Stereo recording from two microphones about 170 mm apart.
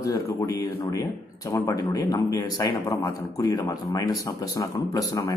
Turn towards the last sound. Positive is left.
turn(degrees=20)  # may be behind; listen again after turning